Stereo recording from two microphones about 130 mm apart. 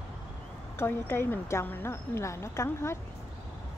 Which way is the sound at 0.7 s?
15° left (ahead or behind).